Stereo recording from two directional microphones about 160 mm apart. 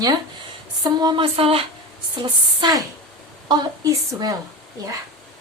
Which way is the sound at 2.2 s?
25° right (ahead or behind).